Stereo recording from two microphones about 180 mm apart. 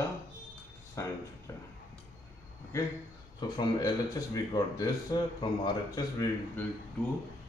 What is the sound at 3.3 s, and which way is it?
Speech, 25° left (ahead or behind).